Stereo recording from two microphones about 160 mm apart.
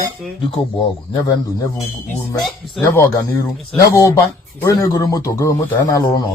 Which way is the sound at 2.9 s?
15° left (ahead or behind).